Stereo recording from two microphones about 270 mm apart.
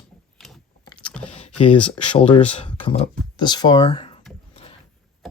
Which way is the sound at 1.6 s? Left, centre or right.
Centre.